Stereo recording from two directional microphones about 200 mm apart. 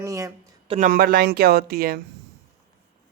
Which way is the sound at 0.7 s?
40° right (ahead or behind).